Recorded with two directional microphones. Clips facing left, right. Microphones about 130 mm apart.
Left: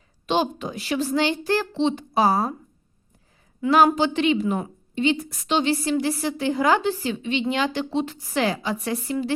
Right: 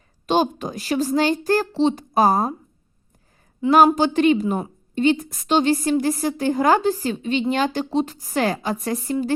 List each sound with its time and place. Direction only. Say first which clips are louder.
0.3 s a woman's voice: right 3 dB; 40° right (ahead or behind)
3.9 s a woman's voice: right 4 dB; 45° right (ahead or behind)